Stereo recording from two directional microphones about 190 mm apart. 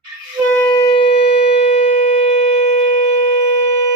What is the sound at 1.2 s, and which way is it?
Shofar, 45° left (ahead or behind).